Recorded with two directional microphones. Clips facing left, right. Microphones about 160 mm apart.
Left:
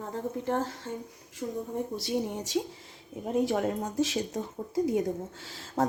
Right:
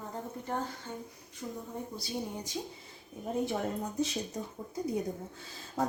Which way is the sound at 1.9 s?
80° left.